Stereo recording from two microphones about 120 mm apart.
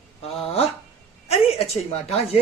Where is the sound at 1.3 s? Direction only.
55° left (ahead or behind).